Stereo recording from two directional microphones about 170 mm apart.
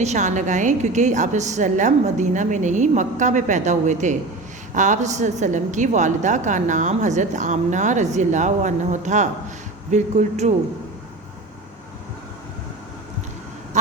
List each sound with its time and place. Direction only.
0.0 s a woman's voice: 45° right (ahead or behind)